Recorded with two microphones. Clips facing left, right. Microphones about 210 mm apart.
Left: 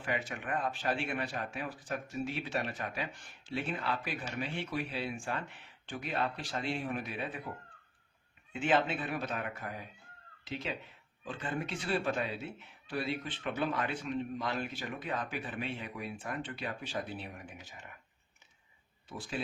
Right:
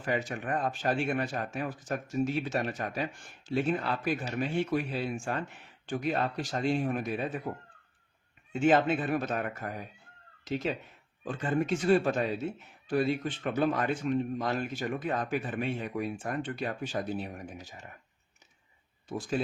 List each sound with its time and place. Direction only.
0.0 s speech: 40° right (ahead or behind)
8.5 s speech: 45° right (ahead or behind)
19.0 s speech: 45° right (ahead or behind)